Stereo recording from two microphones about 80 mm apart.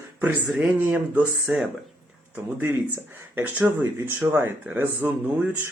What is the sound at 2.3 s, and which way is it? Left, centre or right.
Speech, right.